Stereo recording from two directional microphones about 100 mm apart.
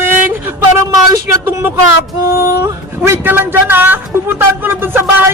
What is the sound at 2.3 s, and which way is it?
Speech, 25° right (ahead or behind).